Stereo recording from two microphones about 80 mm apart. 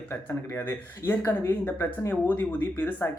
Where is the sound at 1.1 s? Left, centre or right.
Left.